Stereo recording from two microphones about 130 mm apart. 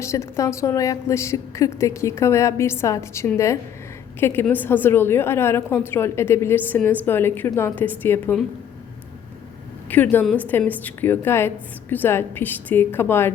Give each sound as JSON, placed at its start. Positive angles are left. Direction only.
{"t": 0.0, "sound": "a woman's voice", "side_deg": 25}
{"t": 9.9, "sound": "a woman's voice", "side_deg": 15}